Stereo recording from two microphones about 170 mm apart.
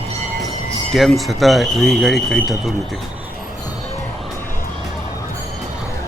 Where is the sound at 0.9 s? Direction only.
Centre (ahead or behind).